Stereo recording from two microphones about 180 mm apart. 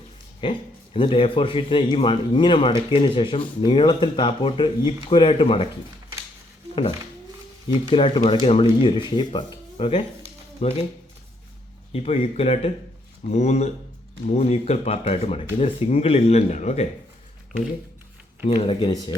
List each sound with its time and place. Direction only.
0.4 s a man's voice: 25° left (ahead or behind)
7.9 s a man's voice: 30° left (ahead or behind)
11.9 s speech: 35° left (ahead or behind)
18.4 s a man's voice: 30° left (ahead or behind)